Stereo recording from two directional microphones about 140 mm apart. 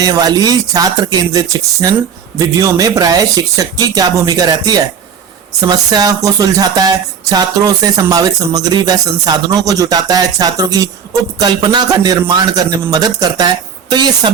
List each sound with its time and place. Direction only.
0.0 s speech: 30° right (ahead or behind)